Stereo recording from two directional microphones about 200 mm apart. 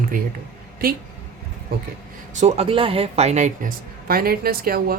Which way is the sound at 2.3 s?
35° right (ahead or behind).